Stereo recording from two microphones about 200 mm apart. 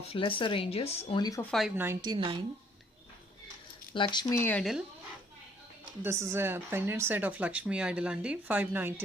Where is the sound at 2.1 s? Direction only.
25° right (ahead or behind).